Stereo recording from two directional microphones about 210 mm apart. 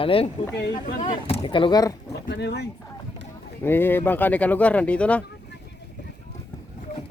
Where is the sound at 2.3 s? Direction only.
55° left (ahead or behind).